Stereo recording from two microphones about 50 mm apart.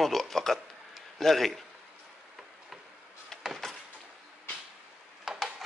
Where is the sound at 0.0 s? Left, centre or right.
Centre.